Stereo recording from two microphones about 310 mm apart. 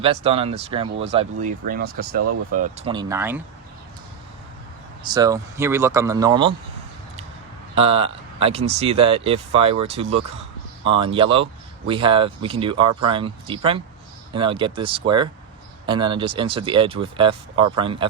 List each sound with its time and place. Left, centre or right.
0.0 s speech: centre
5.0 s speech: centre
7.8 s speech: centre